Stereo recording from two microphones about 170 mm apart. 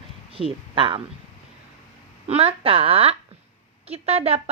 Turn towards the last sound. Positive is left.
turn(degrees=-35)  # may be behind; listen again after turning